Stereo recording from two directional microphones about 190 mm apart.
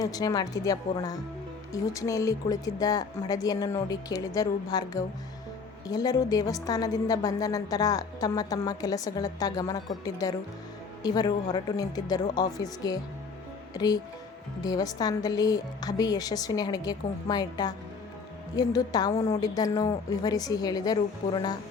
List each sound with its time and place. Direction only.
0.0 s a woman's voice: 20° left (ahead or behind)